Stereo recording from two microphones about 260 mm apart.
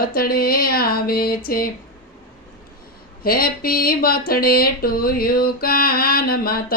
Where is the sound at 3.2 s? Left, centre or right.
Left.